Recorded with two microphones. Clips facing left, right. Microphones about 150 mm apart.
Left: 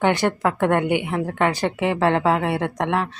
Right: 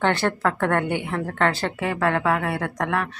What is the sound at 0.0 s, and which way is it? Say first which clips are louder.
A woman's voice: left 2 dB; 15° left (ahead or behind).